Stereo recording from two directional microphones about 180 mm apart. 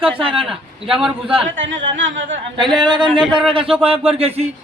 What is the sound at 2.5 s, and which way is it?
A man's voice, 25° right (ahead or behind).